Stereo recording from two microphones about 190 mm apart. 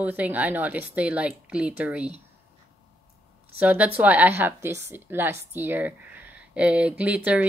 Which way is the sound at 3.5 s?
5° right (ahead or behind).